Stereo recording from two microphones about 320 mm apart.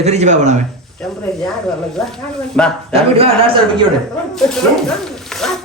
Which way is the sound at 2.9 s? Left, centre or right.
Centre.